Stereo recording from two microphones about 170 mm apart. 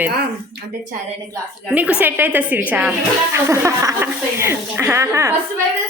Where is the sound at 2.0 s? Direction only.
10° right (ahead or behind).